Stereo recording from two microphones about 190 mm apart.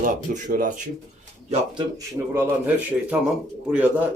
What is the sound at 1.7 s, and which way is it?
Speech, 15° right (ahead or behind).